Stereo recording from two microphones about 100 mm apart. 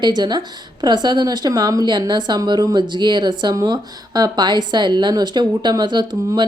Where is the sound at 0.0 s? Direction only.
45° right (ahead or behind).